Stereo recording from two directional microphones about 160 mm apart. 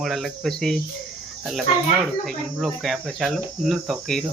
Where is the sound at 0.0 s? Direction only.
Centre (ahead or behind).